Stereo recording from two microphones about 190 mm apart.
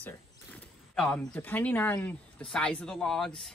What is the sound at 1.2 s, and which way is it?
Speech, 10° left (ahead or behind).